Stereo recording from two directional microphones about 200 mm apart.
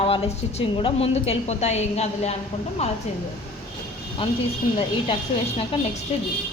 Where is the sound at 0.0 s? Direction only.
30° left (ahead or behind).